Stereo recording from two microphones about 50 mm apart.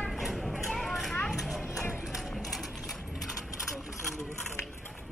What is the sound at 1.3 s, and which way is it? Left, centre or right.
Children playing, centre.